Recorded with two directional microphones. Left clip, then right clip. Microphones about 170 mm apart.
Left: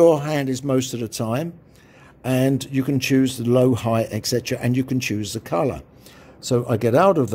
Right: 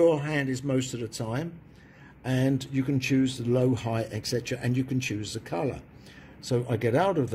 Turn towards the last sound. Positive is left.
turn(degrees=45)  # may be behind; listen again after turning